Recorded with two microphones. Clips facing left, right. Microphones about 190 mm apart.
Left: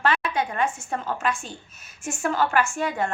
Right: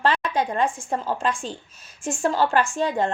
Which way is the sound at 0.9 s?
10° right (ahead or behind).